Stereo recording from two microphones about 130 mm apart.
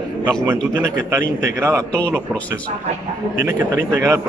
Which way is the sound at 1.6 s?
20° right (ahead or behind).